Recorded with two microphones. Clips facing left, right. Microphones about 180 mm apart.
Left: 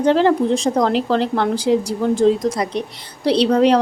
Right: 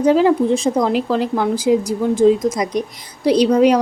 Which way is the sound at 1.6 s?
35° left (ahead or behind).